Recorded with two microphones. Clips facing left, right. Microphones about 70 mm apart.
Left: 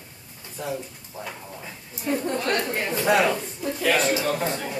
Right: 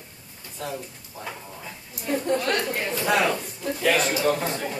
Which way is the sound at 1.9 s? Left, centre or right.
Left.